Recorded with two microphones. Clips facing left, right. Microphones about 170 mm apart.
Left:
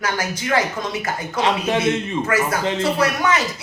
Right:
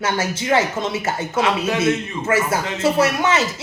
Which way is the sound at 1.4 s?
30° left (ahead or behind).